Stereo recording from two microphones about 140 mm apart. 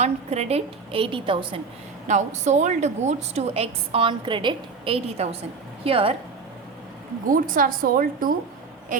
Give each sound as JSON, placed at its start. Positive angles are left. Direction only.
{"t": 0.0, "sound": "a woman's voice", "side_deg": -50}
{"t": 2.0, "sound": "a woman's voice", "side_deg": -60}
{"t": 7.3, "sound": "speech", "side_deg": -80}
{"t": 8.9, "sound": "a sound", "side_deg": -70}